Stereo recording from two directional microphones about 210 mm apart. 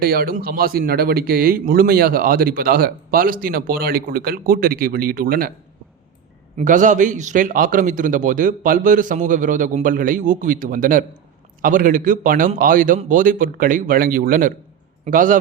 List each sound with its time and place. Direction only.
0.0 s a man's voice: 45° right (ahead or behind)
6.6 s a man's voice: 35° right (ahead or behind)